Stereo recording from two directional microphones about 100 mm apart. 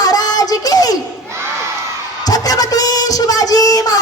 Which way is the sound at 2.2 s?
40° left (ahead or behind).